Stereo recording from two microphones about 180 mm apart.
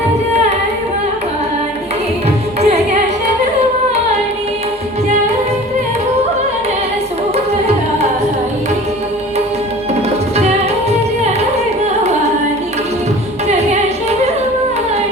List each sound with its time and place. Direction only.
2.6 s music: 35° right (ahead or behind)